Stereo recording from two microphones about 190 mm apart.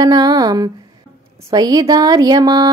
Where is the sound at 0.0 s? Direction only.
20° right (ahead or behind).